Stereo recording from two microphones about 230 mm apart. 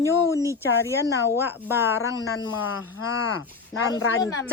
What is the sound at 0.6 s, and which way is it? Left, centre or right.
Speech, centre.